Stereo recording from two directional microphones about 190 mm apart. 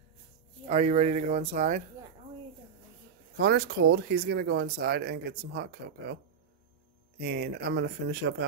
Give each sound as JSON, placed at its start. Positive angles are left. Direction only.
{"t": 0.7, "sound": "speech", "side_deg": -35}
{"t": 3.3, "sound": "speech", "side_deg": -60}
{"t": 7.2, "sound": "speech", "side_deg": -60}